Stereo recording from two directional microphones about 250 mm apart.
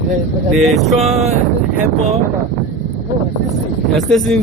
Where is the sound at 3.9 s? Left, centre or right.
Centre.